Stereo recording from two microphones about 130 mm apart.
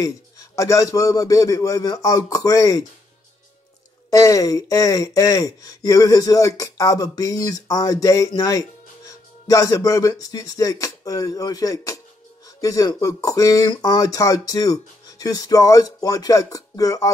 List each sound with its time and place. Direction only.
0.0 s speech: 25° left (ahead or behind)
4.1 s speech: 25° left (ahead or behind)